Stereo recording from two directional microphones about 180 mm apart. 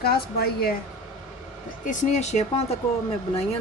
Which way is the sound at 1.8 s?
40° left (ahead or behind).